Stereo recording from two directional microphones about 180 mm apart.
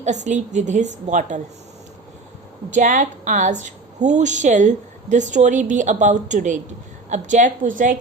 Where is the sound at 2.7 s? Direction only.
45° right (ahead or behind).